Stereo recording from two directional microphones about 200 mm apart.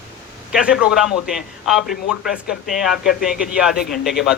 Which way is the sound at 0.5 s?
5° right (ahead or behind).